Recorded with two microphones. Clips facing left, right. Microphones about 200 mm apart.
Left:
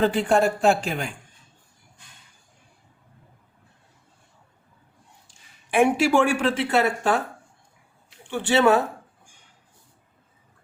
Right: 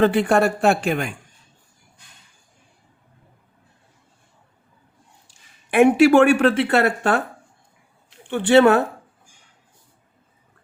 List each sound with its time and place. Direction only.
0.0 s speech: 65° right (ahead or behind)
5.7 s speech: 60° right (ahead or behind)
8.3 s speech: 60° right (ahead or behind)